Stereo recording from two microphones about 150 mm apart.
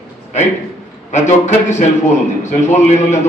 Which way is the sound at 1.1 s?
50° left (ahead or behind).